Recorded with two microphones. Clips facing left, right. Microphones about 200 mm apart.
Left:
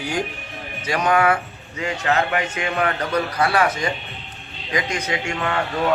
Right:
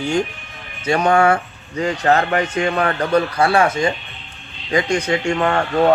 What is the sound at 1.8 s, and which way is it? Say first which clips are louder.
A man's voice: right 5 dB; 40° right (ahead or behind).